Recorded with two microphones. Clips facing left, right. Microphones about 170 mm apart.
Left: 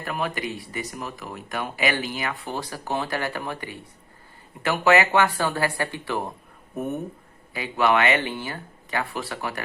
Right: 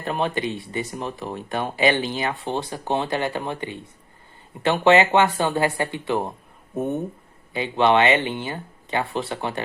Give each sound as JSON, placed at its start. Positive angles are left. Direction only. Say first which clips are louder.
{"t": 0.0, "sound": "speech", "louder": "right 4 dB", "side_deg": -25}